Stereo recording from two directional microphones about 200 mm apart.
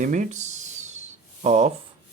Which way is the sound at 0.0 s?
40° right (ahead or behind).